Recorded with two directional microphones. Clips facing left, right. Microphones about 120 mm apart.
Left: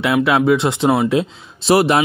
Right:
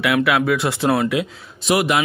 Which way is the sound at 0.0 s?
25° left (ahead or behind).